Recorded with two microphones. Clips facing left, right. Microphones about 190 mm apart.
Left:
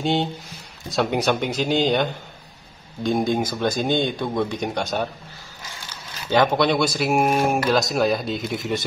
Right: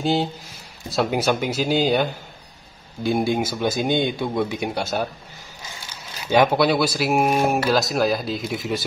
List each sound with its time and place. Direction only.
0.0 s speech: centre (ahead or behind)
6.2 s speech: 10° right (ahead or behind)